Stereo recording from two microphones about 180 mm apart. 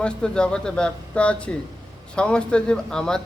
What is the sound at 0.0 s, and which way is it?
Mantra, 5° left (ahead or behind).